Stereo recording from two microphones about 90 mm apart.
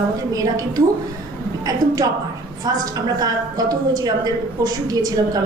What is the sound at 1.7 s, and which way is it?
A woman's voice, 40° right (ahead or behind).